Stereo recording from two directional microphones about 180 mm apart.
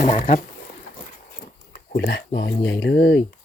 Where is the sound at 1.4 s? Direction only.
60° left (ahead or behind).